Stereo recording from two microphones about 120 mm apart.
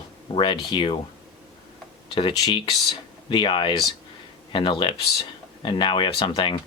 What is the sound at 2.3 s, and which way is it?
Speech, 30° left (ahead or behind).